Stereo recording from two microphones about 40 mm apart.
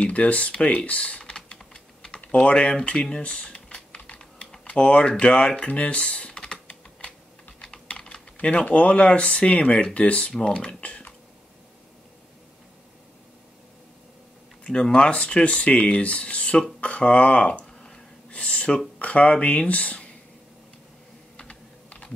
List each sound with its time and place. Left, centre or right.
0.0 s speech: left
0.7 s speech: left
1.3 s typing: centre
2.3 s speech: left
2.8 s typing: left
4.2 s typing: centre
4.6 s speech: left
6.7 s typing: left
8.4 s speech: left
10.3 s speech: left
14.6 s speech: left
17.6 s a sound: centre
18.9 s speech: left
21.4 s typing: left